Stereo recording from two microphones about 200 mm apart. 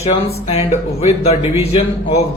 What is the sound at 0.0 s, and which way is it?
A man's voice, 30° left (ahead or behind).